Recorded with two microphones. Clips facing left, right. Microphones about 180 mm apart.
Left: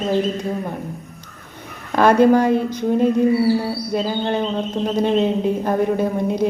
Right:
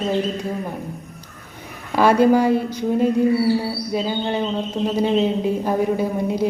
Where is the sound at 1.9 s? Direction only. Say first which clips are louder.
Left 2 dB; 10° right (ahead or behind).